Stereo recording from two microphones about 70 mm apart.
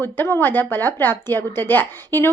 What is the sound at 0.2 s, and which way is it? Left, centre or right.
Speech, left.